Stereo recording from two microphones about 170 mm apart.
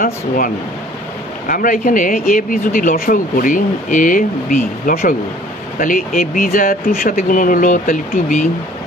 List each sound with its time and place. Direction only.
1.5 s speech: 55° left (ahead or behind)